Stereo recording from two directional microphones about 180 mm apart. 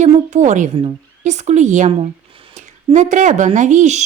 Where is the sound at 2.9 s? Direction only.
40° right (ahead or behind).